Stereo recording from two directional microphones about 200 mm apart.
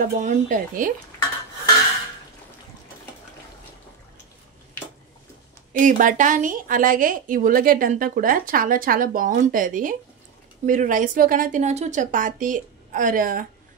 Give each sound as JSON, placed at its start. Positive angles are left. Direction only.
{"t": 0.2, "sound": "speech", "side_deg": -40}
{"t": 5.7, "sound": "a woman's voice", "side_deg": -40}